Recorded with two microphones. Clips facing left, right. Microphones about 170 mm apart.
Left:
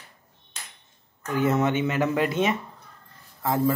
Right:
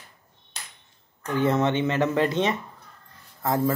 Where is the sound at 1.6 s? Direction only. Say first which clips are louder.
Right 1 dB; 10° left (ahead or behind).